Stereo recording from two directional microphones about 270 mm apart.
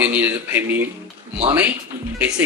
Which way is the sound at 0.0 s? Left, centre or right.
Centre.